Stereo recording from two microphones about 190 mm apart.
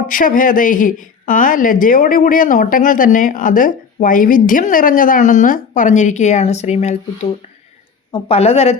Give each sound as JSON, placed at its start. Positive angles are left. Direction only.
{"t": 0.1, "sound": "a woman's voice", "side_deg": 45}